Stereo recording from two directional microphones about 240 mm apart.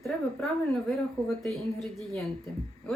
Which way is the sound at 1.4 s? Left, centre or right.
Centre.